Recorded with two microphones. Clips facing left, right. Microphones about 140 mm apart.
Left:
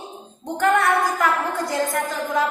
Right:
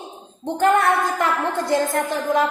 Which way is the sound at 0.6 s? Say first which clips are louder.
Right 1 dB; 25° right (ahead or behind).